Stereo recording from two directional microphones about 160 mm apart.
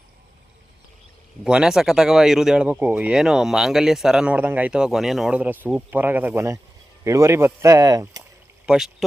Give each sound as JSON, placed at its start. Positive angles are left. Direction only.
{"t": 1.5, "sound": "speech", "side_deg": -5}
{"t": 8.6, "sound": "speech", "side_deg": -5}